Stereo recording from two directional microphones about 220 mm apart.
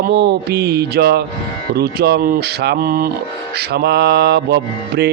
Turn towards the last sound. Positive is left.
turn(degrees=-50)  # may be behind; listen again after turning